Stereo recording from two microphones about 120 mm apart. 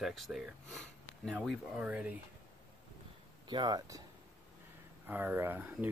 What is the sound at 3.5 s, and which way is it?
Speech, 35° right (ahead or behind).